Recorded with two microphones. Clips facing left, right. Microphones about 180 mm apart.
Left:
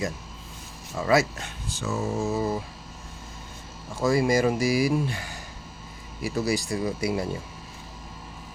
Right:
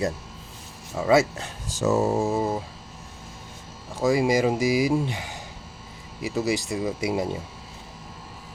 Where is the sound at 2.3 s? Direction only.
25° right (ahead or behind).